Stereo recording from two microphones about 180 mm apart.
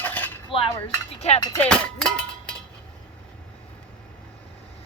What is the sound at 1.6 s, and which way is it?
Speech, 5° left (ahead or behind).